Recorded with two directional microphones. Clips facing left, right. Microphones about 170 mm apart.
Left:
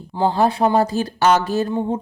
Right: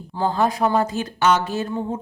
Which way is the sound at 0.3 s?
30° left (ahead or behind).